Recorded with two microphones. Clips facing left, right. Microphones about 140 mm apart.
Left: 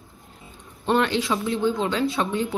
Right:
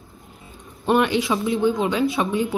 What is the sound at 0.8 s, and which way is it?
Speech, 15° right (ahead or behind).